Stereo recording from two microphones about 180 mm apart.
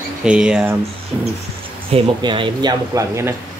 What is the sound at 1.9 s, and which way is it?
Speech, 30° right (ahead or behind).